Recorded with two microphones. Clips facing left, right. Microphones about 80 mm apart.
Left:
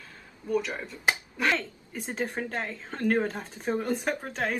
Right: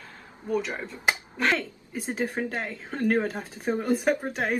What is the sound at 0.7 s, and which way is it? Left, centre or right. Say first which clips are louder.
Speech: right 1 dB; right.